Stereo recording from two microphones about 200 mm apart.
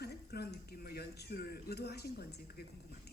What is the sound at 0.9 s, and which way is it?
A man's voice, 50° left (ahead or behind).